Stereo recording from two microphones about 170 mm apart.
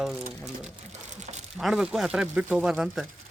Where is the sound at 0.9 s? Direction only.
45° right (ahead or behind).